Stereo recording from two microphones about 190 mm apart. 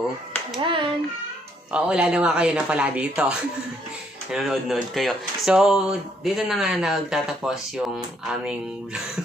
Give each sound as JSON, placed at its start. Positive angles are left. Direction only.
{"t": 0.6, "sound": "a child's voice", "side_deg": -25}
{"t": 1.7, "sound": "speech", "side_deg": -5}